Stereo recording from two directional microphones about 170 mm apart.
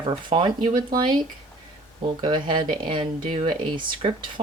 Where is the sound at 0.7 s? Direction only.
55° right (ahead or behind).